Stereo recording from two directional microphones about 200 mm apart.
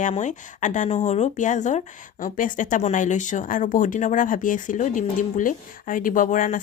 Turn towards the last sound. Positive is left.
turn(degrees=40)  # may be behind; listen again after turning